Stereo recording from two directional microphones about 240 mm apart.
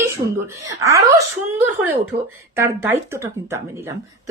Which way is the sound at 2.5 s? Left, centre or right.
Centre.